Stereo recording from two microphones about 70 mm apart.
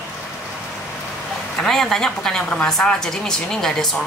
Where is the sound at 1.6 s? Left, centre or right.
Centre.